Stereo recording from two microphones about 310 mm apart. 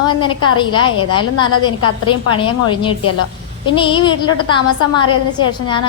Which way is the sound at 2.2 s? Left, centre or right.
Centre.